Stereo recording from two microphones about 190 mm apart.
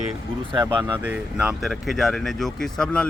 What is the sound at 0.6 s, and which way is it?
Speech, 10° right (ahead or behind).